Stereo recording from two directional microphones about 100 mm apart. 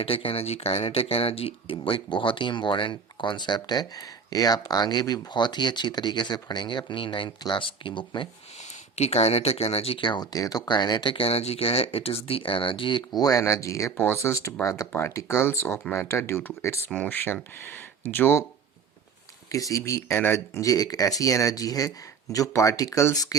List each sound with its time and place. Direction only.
0.0 s speech: 70° left (ahead or behind)
9.0 s speech: 90° left
10.0 s speech: 55° left (ahead or behind)
10.3 s speech: 40° left (ahead or behind); by 18.4 s 25° left (ahead or behind)
19.5 s speech: 35° left (ahead or behind)